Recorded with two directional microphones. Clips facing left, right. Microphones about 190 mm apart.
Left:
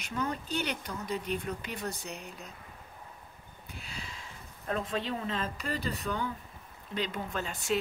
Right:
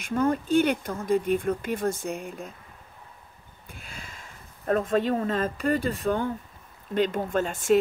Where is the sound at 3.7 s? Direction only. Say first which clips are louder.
Right 1 dB; 50° right (ahead or behind).